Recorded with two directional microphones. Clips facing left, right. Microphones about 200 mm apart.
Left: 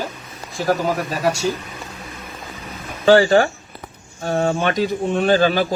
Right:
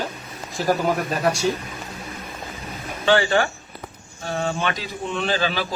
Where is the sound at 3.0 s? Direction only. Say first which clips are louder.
Left 6 dB; 40° left (ahead or behind).